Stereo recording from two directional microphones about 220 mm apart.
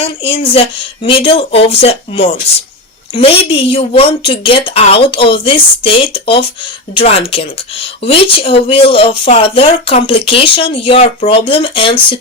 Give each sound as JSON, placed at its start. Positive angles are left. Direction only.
{"t": 0.0, "sound": "speech", "side_deg": 25}